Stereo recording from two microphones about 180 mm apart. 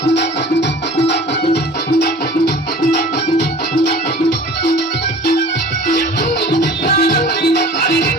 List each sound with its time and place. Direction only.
6.8 s music: 60° left (ahead or behind)